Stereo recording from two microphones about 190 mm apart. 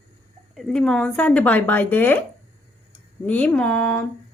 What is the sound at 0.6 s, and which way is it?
Speech, 5° left (ahead or behind).